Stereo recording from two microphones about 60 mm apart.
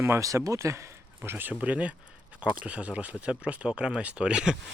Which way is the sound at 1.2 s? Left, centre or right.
Right.